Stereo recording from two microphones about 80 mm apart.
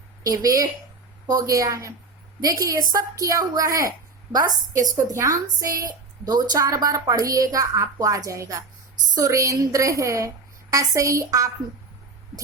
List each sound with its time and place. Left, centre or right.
0.2 s a woman's voice: right